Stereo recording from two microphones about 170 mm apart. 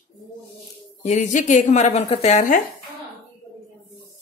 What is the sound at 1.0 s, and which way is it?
A woman's voice, 45° left (ahead or behind).